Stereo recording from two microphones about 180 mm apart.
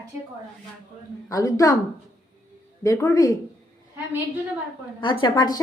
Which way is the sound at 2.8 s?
15° left (ahead or behind).